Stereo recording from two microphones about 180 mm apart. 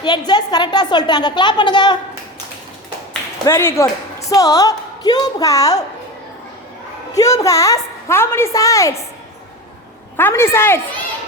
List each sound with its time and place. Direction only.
0.0 s a woman's voice: 25° left (ahead or behind)
3.4 s a woman's voice: 15° left (ahead or behind)
7.1 s a woman's voice: 20° left (ahead or behind)
10.2 s a woman's voice: 10° left (ahead or behind)